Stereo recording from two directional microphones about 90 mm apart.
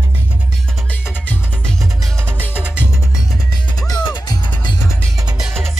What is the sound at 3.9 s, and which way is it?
Music, 55° left (ahead or behind).